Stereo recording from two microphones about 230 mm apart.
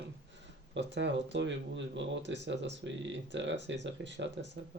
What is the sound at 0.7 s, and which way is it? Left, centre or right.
Speech, right.